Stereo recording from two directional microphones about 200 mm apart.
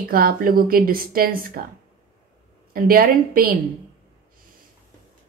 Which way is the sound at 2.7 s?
45° right (ahead or behind).